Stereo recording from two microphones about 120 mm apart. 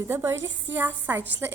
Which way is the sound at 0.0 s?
20° right (ahead or behind).